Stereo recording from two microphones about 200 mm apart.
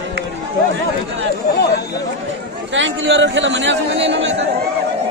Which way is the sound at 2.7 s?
70° right (ahead or behind).